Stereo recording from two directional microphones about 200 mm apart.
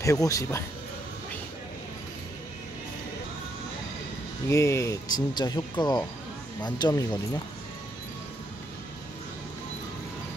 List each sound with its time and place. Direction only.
0.0 s speech: 15° left (ahead or behind)
4.5 s speech: 15° left (ahead or behind)